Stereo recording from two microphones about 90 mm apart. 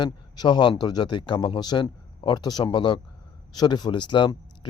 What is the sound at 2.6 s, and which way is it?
Speech, 60° left (ahead or behind).